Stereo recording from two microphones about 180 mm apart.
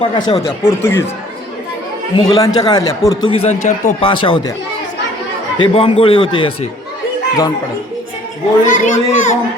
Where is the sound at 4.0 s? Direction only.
30° left (ahead or behind).